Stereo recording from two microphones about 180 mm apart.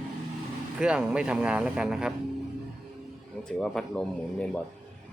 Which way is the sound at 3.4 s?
Centre (ahead or behind).